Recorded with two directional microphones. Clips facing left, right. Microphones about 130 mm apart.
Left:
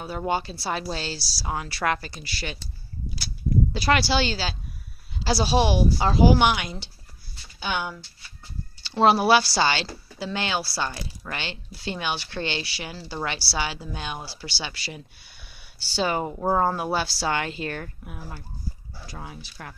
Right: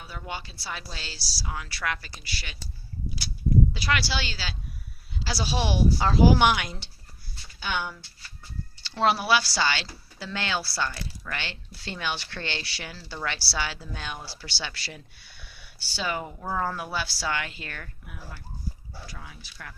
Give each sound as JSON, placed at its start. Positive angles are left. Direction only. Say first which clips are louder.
{"t": 0.0, "sound": "speech", "louder": "left 10 dB", "side_deg": 40}
{"t": 3.7, "sound": "speech", "louder": "left 6 dB", "side_deg": 35}
{"t": 6.1, "sound": "speech", "louder": "left 1 dB", "side_deg": 5}
{"t": 7.6, "sound": "speech", "louder": "left 2 dB", "side_deg": 15}
{"t": 9.0, "sound": "speech", "louder": "left 5 dB", "side_deg": 30}
{"t": 16.0, "sound": "speech", "louder": "left 6 dB", "side_deg": 30}